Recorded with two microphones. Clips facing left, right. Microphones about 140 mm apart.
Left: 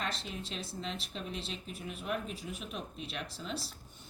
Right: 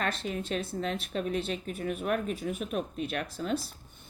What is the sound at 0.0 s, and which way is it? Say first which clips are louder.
A woman's voice: right 7 dB; 55° right (ahead or behind).